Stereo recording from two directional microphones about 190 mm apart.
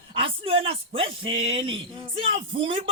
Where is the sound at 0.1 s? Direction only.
30° right (ahead or behind).